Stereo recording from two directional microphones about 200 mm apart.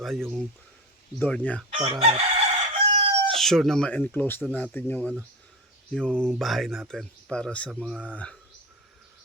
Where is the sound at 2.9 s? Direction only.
30° right (ahead or behind).